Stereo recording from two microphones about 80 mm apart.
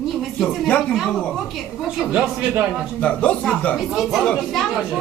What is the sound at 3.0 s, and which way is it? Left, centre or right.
Speech, centre.